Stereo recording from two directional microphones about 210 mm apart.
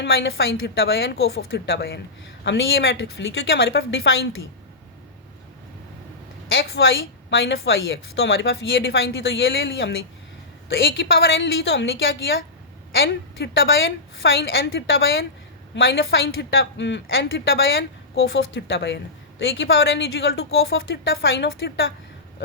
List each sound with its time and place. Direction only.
0.0 s speech: 60° left (ahead or behind)
1.5 s speech: 55° left (ahead or behind)
6.5 s speech: 65° left (ahead or behind)
11.0 s speech: 55° left (ahead or behind)
13.0 s speech: 55° left (ahead or behind)
15.7 s a woman's voice: 55° left (ahead or behind)
18.1 s a woman's voice: 50° left (ahead or behind)